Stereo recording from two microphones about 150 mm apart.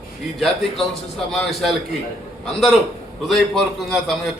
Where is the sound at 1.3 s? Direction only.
Centre (ahead or behind).